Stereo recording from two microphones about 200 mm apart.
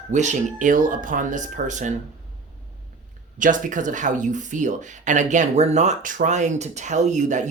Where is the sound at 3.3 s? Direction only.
40° right (ahead or behind).